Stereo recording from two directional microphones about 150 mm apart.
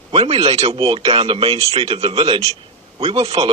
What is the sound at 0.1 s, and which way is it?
A man's voice, 40° right (ahead or behind).